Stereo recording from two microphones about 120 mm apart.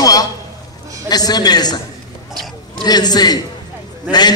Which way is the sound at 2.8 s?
35° left (ahead or behind).